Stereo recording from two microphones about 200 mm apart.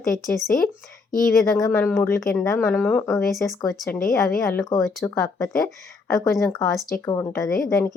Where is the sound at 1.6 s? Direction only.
15° left (ahead or behind).